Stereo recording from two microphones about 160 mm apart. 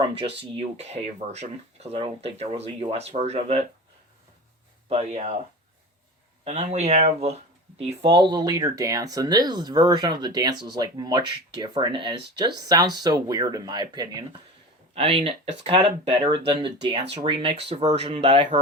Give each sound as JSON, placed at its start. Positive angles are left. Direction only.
{"t": 0.5, "sound": "speech", "side_deg": -40}
{"t": 4.9, "sound": "speech", "side_deg": -45}
{"t": 6.4, "sound": "speech", "side_deg": -45}
{"t": 14.9, "sound": "speech", "side_deg": -35}